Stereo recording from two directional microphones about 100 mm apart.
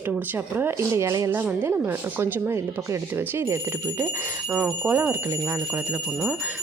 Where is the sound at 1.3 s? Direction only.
20° right (ahead or behind).